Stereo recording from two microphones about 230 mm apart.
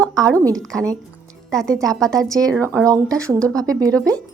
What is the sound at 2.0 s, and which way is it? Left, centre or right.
Speech, centre.